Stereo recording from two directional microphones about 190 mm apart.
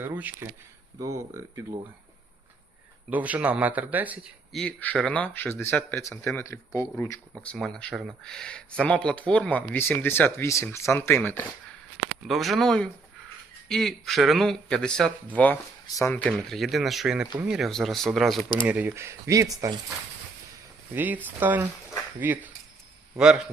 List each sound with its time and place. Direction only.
0.0 s speech: 10° right (ahead or behind)
3.1 s speech: 10° right (ahead or behind)
4.6 s speech: 5° left (ahead or behind)
7.4 s speech: 5° left (ahead or behind); by 19.8 s 20° right (ahead or behind)
20.9 s speech: 10° right (ahead or behind)